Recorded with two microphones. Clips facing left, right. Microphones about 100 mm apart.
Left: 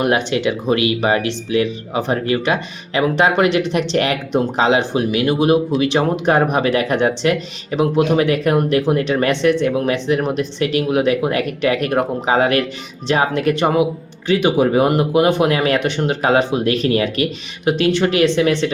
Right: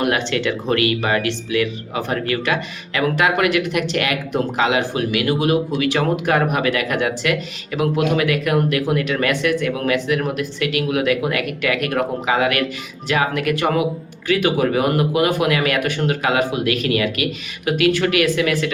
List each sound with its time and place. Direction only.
0.0 s speech: 20° left (ahead or behind)